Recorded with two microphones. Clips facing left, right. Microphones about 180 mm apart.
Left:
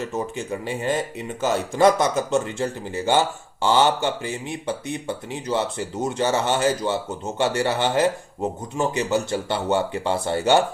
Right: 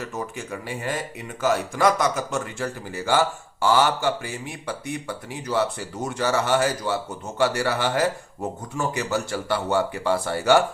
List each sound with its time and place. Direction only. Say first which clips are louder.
0.0 s speech: left 4 dB; 25° left (ahead or behind)